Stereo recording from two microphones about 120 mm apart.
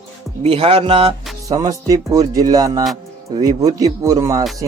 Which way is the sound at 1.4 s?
30° right (ahead or behind).